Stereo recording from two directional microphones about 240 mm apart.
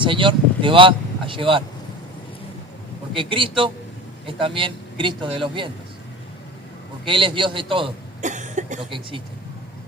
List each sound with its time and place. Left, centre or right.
0.0 s speech: right
3.2 s a man's voice: right
7.0 s a man's voice: right